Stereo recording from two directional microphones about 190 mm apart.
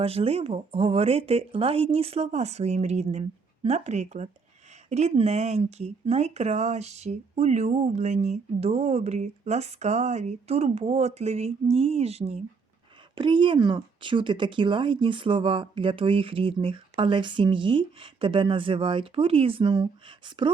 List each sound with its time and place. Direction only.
0.0 s speech: 30° right (ahead or behind)